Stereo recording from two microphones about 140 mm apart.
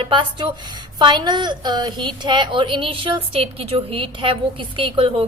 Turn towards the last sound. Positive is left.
turn(degrees=-40)  # may be behind; listen again after turning